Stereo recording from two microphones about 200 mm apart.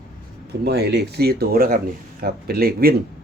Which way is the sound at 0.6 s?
55° right (ahead or behind).